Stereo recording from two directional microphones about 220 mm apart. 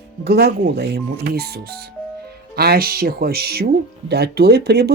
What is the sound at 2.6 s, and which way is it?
Speech, 45° right (ahead or behind).